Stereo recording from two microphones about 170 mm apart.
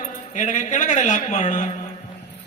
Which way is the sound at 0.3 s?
45° left (ahead or behind).